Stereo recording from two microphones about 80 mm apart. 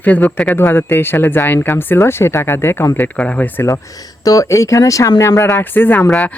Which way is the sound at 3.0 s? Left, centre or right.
Centre.